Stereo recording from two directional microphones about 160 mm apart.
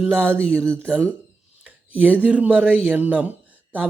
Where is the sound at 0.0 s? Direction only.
5° left (ahead or behind).